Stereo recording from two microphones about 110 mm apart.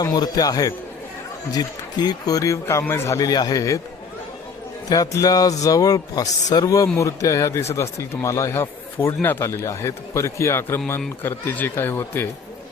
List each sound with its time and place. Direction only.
0.0 s speech: 35° left (ahead or behind)
4.9 s speech: 35° left (ahead or behind)